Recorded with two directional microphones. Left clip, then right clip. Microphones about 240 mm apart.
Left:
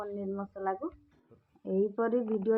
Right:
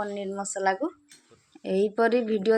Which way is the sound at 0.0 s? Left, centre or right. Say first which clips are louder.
Right 6 dB; right.